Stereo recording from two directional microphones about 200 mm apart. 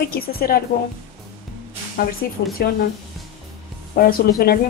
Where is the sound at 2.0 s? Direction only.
45° left (ahead or behind).